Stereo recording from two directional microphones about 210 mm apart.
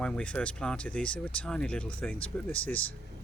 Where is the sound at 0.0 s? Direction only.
5° left (ahead or behind).